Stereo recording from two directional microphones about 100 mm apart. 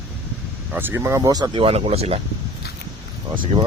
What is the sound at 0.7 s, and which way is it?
Speech, 20° right (ahead or behind).